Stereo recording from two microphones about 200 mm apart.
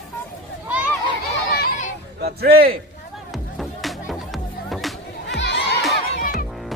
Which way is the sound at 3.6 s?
Centre (ahead or behind).